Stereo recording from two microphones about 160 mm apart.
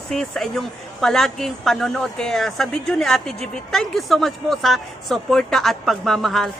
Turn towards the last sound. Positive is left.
turn(degrees=0)  # may be behind; listen again after turning